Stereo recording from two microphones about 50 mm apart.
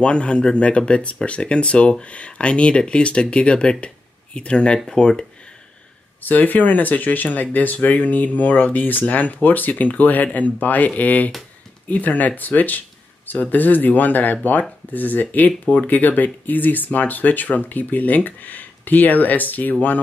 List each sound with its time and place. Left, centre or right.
0.0 s speech: left
6.2 s speech: left